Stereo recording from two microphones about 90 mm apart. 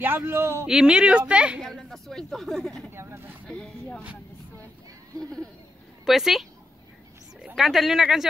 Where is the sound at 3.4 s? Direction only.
10° left (ahead or behind).